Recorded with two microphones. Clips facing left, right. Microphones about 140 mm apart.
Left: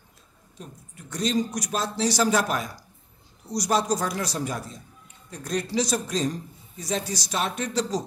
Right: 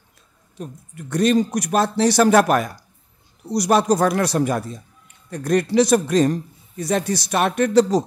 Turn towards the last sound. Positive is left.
turn(degrees=-60)  # may be behind; listen again after turning